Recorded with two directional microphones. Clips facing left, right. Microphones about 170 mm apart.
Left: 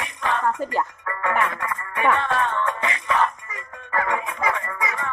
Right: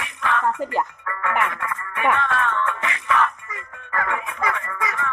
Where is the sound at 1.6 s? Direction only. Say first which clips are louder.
Left 1 dB; 35° left (ahead or behind).